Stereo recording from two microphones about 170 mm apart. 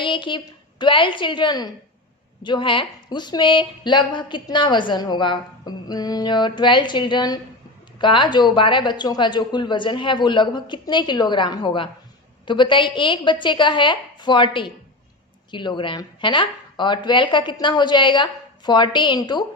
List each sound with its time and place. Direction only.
0.0 s a woman's voice: 30° left (ahead or behind)